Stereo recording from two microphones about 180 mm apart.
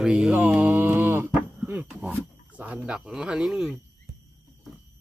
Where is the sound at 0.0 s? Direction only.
5° right (ahead or behind).